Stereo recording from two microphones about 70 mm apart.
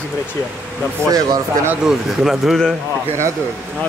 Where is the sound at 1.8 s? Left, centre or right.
Centre.